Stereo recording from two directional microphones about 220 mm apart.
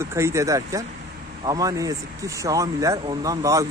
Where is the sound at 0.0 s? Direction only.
15° right (ahead or behind).